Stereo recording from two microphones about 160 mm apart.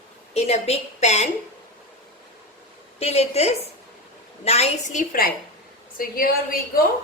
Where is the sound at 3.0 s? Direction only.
40° left (ahead or behind); by 6.6 s 65° left (ahead or behind).